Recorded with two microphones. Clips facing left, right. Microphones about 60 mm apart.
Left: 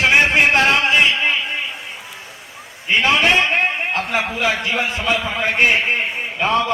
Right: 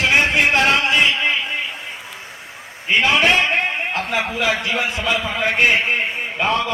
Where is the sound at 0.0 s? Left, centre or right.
Left.